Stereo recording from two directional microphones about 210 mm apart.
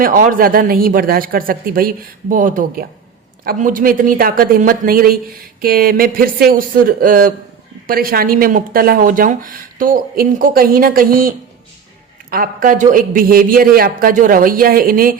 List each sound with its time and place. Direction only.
0.0 s speech: 40° right (ahead or behind)